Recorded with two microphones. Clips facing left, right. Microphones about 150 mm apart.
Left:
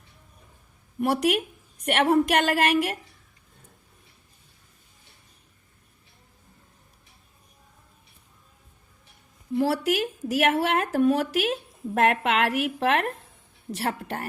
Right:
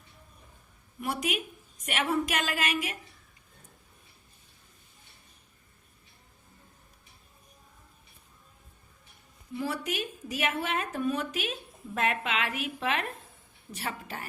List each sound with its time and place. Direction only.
0.9 s a woman's voice: 60° left (ahead or behind)
9.6 s a woman's voice: 85° left; by 14.3 s 65° left (ahead or behind)